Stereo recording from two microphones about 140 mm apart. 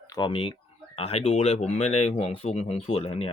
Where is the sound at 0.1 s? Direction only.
35° left (ahead or behind).